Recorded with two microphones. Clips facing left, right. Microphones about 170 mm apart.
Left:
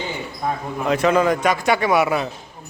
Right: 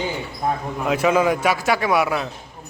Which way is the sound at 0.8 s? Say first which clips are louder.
Left 1 dB; 5° right (ahead or behind).